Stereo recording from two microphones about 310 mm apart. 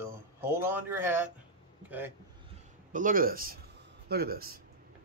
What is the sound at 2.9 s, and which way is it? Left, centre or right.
Speech, right.